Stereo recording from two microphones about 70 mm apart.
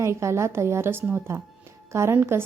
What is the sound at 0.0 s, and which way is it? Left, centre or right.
A woman's voice, right.